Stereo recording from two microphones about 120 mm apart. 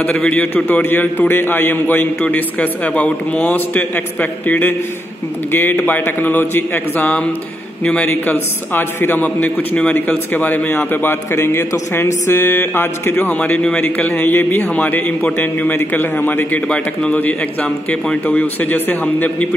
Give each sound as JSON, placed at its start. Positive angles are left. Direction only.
{"t": 0.0, "sound": "a man's voice", "side_deg": 10}